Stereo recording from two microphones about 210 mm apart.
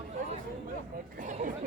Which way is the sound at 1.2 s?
35° right (ahead or behind).